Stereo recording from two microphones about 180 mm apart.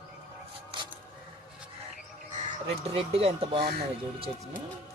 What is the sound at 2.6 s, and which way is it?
Speech, 35° right (ahead or behind).